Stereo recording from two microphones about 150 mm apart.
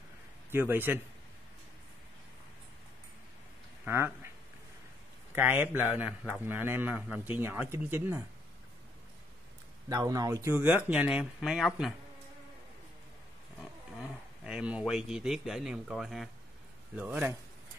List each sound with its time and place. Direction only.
0.5 s a man's voice: 15° right (ahead or behind)
3.8 s speech: 15° right (ahead or behind)
5.3 s a man's voice: 15° right (ahead or behind)
9.8 s speech: 25° right (ahead or behind); by 11.9 s centre (ahead or behind)
14.4 s a man's voice: 5° right (ahead or behind)